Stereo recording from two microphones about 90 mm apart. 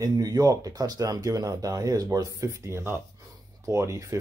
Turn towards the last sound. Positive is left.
turn(degrees=-35)  # may be behind; listen again after turning